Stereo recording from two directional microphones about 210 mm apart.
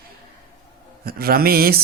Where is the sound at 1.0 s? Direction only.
45° right (ahead or behind).